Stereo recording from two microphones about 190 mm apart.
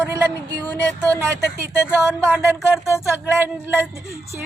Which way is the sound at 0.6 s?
10° left (ahead or behind).